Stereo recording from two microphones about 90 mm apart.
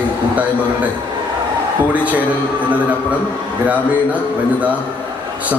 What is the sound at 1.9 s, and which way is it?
Speech, 15° right (ahead or behind).